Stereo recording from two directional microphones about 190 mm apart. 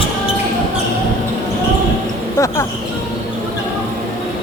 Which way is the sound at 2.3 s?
15° left (ahead or behind).